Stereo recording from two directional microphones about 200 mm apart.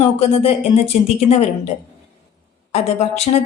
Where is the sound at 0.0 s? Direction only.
30° left (ahead or behind).